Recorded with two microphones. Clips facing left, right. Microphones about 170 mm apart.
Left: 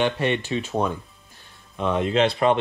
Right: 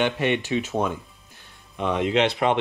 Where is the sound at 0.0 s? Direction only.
20° right (ahead or behind).